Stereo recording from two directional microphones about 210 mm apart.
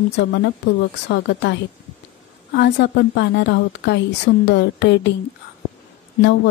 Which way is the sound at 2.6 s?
55° left (ahead or behind).